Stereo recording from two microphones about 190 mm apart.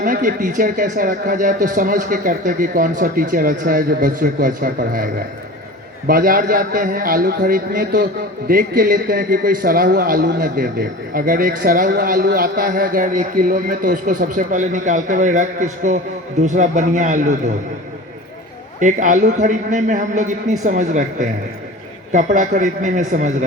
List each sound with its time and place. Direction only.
0.0 s a man's voice: 45° right (ahead or behind)
6.1 s a man's voice: 50° right (ahead or behind)
18.8 s a man's voice: 40° right (ahead or behind)